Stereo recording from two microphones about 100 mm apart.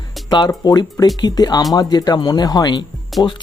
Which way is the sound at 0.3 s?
45° left (ahead or behind).